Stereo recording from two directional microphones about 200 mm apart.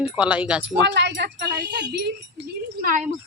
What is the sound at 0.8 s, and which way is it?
Speech, 60° right (ahead or behind).